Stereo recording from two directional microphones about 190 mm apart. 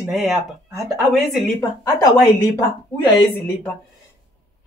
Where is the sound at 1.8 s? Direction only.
15° left (ahead or behind).